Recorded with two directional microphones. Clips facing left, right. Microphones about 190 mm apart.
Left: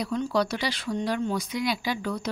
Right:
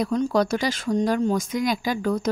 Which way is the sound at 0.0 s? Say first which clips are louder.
Right 5 dB; 45° right (ahead or behind).